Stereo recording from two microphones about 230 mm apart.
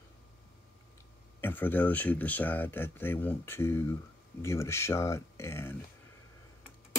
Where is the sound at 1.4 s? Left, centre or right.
Centre.